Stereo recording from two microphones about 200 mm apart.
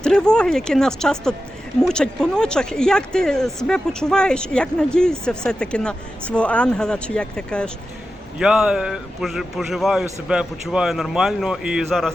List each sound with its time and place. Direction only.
0.0 s speech: 5° left (ahead or behind)